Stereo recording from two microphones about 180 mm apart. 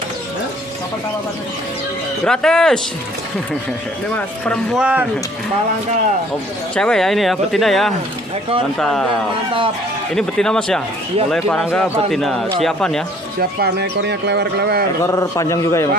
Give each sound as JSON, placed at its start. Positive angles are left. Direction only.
{"t": 2.2, "sound": "speech", "side_deg": 5}
{"t": 4.7, "sound": "speech", "side_deg": -5}
{"t": 6.7, "sound": "speech", "side_deg": 5}
{"t": 10.1, "sound": "speech", "side_deg": 5}
{"t": 13.4, "sound": "speech", "side_deg": -65}
{"t": 15.0, "sound": "a man's voice", "side_deg": 15}